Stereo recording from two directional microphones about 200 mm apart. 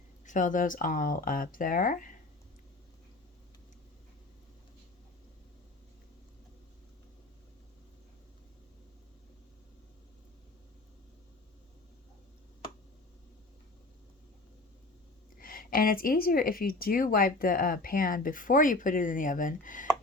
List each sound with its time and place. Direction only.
0.3 s speech: 40° left (ahead or behind)
15.4 s speech: 45° left (ahead or behind)